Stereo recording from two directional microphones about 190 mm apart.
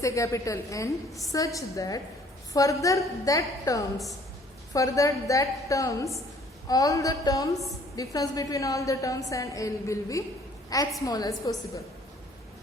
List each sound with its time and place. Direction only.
0.0 s a woman's voice: 15° left (ahead or behind)